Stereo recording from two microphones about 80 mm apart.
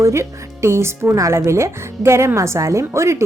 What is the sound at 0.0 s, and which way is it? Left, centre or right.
Speech, right.